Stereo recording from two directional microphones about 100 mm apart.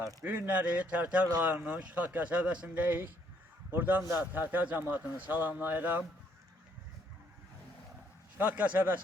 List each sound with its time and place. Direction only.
0.3 s a man's voice: 15° right (ahead or behind)
8.4 s speech: 15° right (ahead or behind)